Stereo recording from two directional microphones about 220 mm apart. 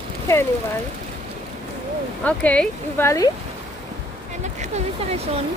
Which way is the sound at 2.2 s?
5° left (ahead or behind).